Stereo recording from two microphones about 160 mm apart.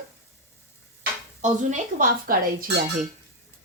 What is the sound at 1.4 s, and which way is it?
Speech, 50° right (ahead or behind).